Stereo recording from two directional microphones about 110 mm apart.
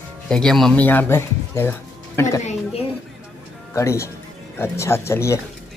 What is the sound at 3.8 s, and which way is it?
Speech, 25° left (ahead or behind).